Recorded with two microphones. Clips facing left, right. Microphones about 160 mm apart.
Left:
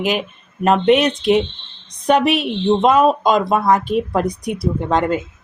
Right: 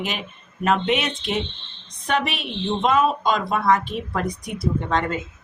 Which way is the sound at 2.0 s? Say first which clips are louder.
Left 9 dB; 40° left (ahead or behind).